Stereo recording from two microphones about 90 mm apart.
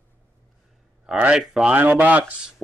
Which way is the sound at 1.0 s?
10° right (ahead or behind).